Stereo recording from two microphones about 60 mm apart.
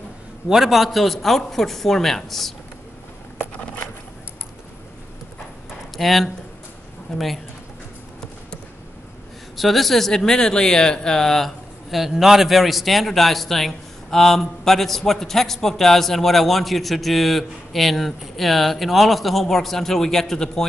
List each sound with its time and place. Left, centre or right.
0.5 s speech: centre
3.5 s patter: left
5.9 s speech: centre
9.6 s speech: centre